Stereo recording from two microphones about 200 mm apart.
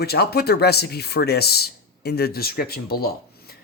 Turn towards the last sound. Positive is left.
turn(degrees=50)  # may be behind; listen again after turning